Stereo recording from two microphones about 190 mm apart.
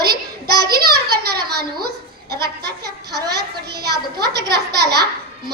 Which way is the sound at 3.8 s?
60° right (ahead or behind).